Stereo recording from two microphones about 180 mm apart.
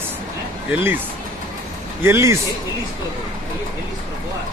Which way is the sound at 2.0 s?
15° right (ahead or behind).